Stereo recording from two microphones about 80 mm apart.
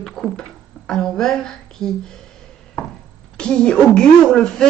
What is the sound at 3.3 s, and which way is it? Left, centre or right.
A woman's voice, centre.